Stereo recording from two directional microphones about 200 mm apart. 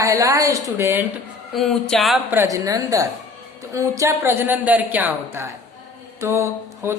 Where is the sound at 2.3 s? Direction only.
15° right (ahead or behind).